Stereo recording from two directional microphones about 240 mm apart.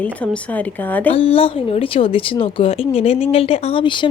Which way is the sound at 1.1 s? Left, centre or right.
Left.